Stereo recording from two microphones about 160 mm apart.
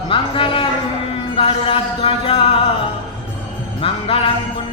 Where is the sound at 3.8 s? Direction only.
35° left (ahead or behind).